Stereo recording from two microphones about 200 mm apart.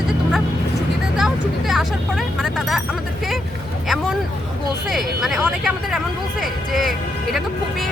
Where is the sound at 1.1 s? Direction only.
Centre (ahead or behind).